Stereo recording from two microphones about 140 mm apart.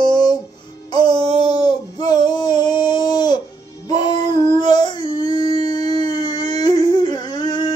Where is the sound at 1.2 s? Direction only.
50° right (ahead or behind).